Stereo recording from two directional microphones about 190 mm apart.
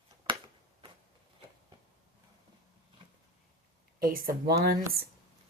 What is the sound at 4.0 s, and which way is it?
Speech, 50° right (ahead or behind).